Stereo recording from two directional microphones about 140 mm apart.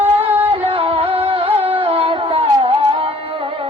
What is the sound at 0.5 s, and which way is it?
Music, 40° right (ahead or behind).